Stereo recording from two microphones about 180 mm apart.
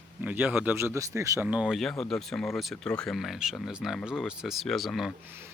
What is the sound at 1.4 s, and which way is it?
Speech, 5° right (ahead or behind).